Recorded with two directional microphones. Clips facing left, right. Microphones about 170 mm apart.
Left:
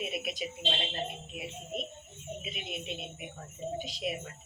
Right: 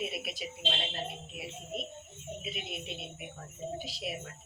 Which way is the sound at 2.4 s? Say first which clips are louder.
Right 1 dB; centre (ahead or behind).